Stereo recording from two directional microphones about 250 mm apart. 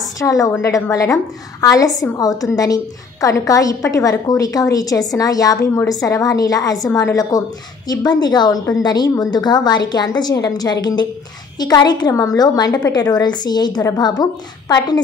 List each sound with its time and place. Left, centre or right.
0.0 s a woman's voice: centre